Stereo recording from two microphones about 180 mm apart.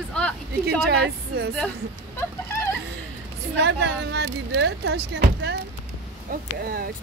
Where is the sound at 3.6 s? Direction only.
75° right (ahead or behind).